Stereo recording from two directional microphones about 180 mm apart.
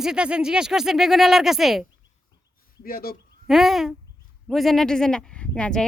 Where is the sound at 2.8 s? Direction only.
55° left (ahead or behind).